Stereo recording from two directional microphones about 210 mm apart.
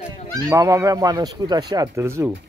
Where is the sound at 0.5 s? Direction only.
15° right (ahead or behind).